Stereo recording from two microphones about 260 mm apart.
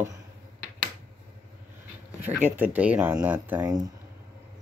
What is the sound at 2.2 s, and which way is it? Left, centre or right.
Speech, centre.